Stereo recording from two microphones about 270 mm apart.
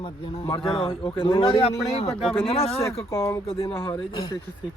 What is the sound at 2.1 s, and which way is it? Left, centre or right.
Speech, centre.